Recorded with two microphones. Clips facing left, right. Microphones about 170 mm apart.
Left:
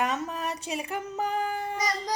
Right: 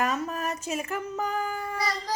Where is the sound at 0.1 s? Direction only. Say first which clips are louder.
Right 1 dB; 20° left (ahead or behind).